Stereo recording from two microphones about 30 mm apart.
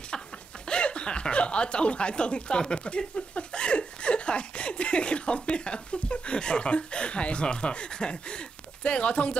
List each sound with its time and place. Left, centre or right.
0.7 s speech: left